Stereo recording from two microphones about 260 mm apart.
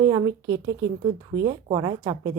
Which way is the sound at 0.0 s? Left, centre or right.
Centre.